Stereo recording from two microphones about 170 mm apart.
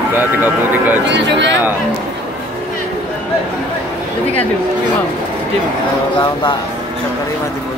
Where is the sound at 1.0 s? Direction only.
90° right.